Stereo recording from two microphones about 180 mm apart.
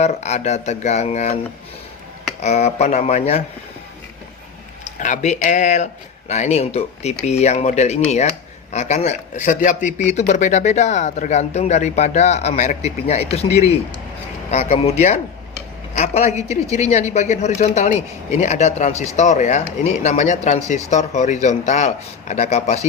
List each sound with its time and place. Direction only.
0.0 s speech: 35° left (ahead or behind)
2.4 s speech: 40° left (ahead or behind)
4.9 s speech: 45° left (ahead or behind)